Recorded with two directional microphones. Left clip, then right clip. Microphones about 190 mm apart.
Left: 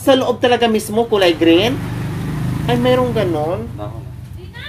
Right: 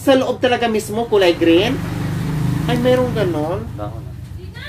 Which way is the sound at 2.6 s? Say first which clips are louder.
Left 1 dB; 40° left (ahead or behind).